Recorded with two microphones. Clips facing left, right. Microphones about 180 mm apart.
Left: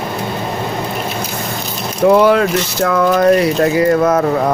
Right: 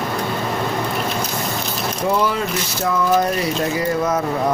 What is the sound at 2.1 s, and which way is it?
Speech, 70° left (ahead or behind).